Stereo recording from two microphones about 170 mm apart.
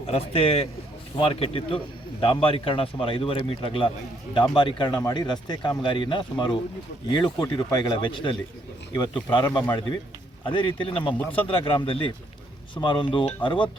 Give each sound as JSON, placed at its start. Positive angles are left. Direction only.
{"t": 0.1, "sound": "a man's voice", "side_deg": 35}